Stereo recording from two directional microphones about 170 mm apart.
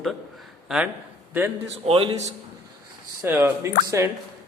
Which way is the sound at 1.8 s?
35° right (ahead or behind).